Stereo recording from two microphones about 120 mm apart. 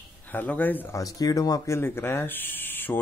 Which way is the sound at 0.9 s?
30° left (ahead or behind).